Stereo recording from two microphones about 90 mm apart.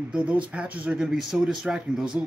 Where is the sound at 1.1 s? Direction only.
5° right (ahead or behind).